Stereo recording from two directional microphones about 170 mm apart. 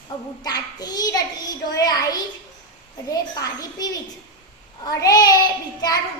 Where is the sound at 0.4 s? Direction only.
25° left (ahead or behind).